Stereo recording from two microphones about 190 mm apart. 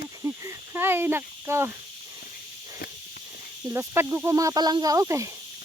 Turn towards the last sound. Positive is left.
turn(degrees=-15)  # may be behind; listen again after turning